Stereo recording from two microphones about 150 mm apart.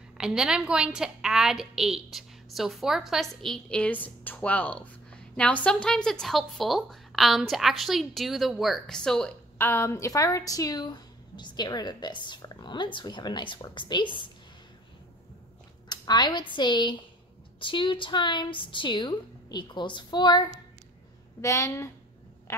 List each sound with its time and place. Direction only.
0.2 s a woman's voice: 5° right (ahead or behind)
9.7 s a woman's voice: 20° left (ahead or behind)
15.9 s a woman's voice: 30° left (ahead or behind)